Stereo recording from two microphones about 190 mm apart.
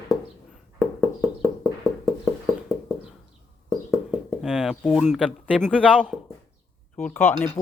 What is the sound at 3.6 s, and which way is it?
Speech, 5° right (ahead or behind).